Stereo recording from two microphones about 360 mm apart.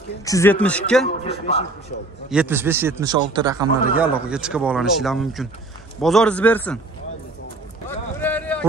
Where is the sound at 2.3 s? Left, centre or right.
Centre.